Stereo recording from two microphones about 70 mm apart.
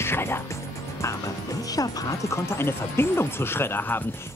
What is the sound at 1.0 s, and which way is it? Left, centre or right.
Speech, left.